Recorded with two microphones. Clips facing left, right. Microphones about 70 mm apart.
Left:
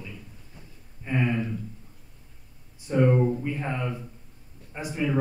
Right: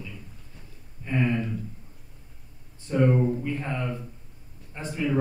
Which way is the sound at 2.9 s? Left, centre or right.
Centre.